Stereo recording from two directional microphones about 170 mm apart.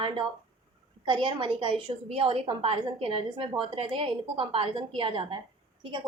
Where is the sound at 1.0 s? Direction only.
30° right (ahead or behind).